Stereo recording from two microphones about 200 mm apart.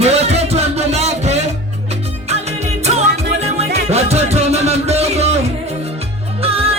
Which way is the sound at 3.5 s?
30° right (ahead or behind).